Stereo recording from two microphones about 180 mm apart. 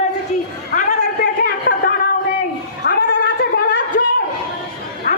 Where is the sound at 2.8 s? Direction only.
55° left (ahead or behind).